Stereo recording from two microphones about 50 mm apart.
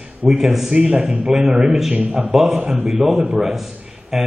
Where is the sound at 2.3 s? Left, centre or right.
Centre.